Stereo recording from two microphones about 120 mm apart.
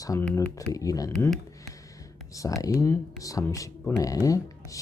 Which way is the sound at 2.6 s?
25° left (ahead or behind).